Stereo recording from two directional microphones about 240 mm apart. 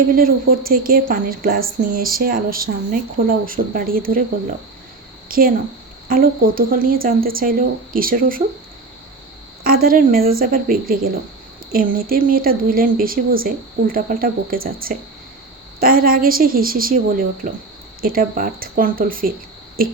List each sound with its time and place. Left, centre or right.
0.1 s speech: right
5.3 s speech: right
9.6 s speech: right